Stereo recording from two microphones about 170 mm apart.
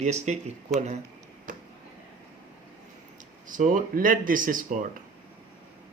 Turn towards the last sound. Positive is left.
turn(degrees=-50)  # may be behind; listen again after turning